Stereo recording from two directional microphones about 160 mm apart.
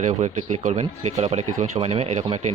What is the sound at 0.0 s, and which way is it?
Speech, 50° right (ahead or behind).